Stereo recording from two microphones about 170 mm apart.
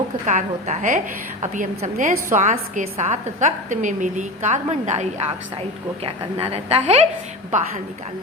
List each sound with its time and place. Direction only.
0.3 s a woman's voice: 45° right (ahead or behind)
6.4 s a woman's voice: 35° right (ahead or behind)